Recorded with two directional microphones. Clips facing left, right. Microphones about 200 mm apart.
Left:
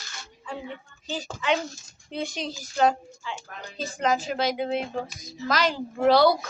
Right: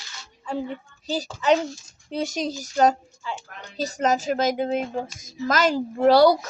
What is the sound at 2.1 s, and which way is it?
Speech, 40° right (ahead or behind).